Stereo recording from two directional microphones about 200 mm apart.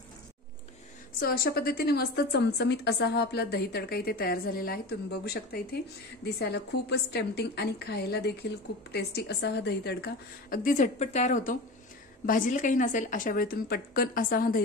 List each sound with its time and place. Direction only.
1.2 s a woman's voice: 50° left (ahead or behind)